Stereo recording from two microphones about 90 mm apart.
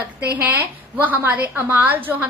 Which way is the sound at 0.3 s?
20° right (ahead or behind).